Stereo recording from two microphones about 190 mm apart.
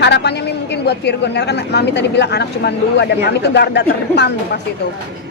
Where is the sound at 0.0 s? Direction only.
65° left (ahead or behind).